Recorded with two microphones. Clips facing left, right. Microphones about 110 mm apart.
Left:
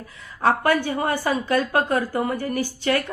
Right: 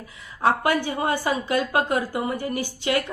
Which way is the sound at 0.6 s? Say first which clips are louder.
Left 2 dB; 20° right (ahead or behind).